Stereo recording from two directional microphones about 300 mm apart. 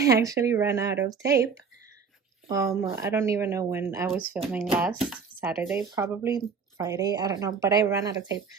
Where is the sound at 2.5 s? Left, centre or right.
Centre.